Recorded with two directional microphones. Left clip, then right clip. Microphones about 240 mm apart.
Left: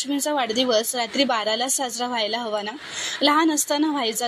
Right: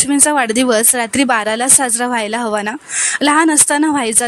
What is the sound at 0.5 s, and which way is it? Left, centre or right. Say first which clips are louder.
Speech: right 7 dB; right.